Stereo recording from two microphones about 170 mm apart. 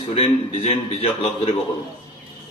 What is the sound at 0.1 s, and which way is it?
A man's voice, 35° left (ahead or behind).